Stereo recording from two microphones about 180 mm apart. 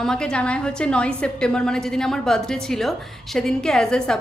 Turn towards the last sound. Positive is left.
turn(degrees=5)  # may be behind; listen again after turning